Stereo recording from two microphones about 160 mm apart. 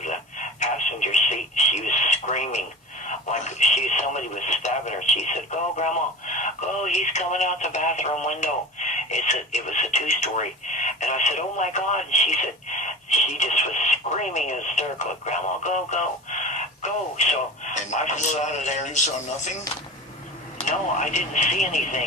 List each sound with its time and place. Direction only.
0.0 s radio: 50° left (ahead or behind)
17.7 s speech: 50° left (ahead or behind)
20.6 s speech: 50° left (ahead or behind)